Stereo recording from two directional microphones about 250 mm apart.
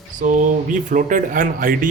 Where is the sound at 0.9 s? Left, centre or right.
Right.